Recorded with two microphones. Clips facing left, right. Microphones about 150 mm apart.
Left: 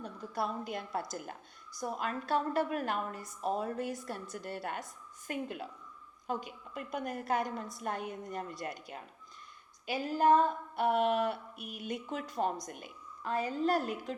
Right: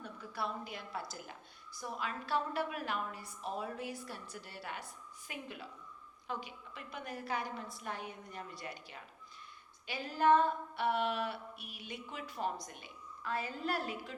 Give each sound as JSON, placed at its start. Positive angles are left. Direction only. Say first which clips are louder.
{"t": 0.0, "sound": "a woman's voice", "louder": "left 5 dB", "side_deg": 40}